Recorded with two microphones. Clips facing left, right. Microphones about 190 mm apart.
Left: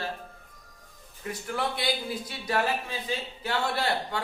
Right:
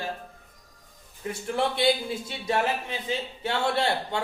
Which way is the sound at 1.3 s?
25° right (ahead or behind).